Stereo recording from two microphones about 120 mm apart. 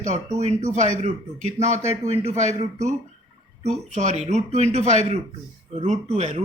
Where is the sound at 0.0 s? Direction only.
75° right (ahead or behind).